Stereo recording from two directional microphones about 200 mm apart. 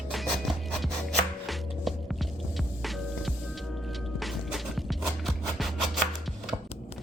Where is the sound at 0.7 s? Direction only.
Centre (ahead or behind).